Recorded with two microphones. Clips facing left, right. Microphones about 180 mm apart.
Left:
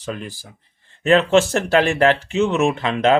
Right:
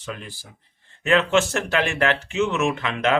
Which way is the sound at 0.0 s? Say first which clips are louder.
Left 6 dB; 35° left (ahead or behind).